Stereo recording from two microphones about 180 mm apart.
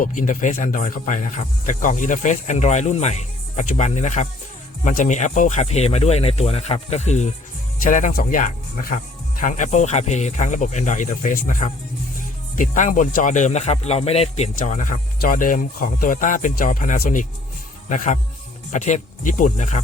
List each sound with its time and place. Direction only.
0.0 s speech: 45° left (ahead or behind)